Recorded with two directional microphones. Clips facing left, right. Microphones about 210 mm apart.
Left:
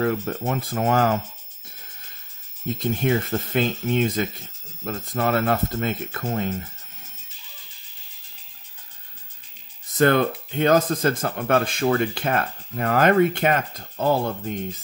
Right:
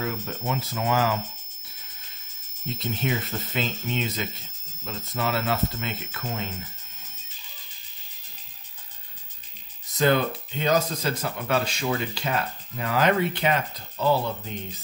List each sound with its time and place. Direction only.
0.0 s speech: 55° left (ahead or behind)
2.7 s speech: 50° left (ahead or behind)
9.9 s speech: 55° left (ahead or behind)